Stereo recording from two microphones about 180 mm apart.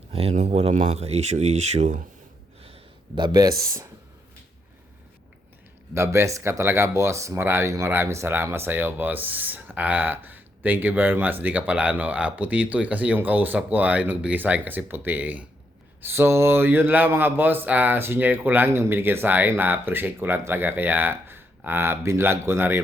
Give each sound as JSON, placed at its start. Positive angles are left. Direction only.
{"t": 0.1, "sound": "speech", "side_deg": -35}
{"t": 2.6, "sound": "a sound", "side_deg": -30}
{"t": 3.6, "sound": "speech", "side_deg": -15}
{"t": 5.9, "sound": "speech", "side_deg": -15}